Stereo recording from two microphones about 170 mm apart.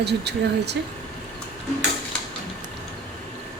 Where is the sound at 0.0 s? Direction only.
80° right.